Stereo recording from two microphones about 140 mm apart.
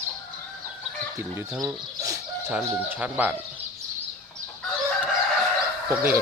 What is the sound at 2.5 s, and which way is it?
Speech, 10° right (ahead or behind).